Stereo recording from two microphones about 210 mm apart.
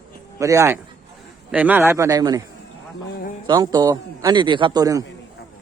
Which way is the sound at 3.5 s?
20° right (ahead or behind).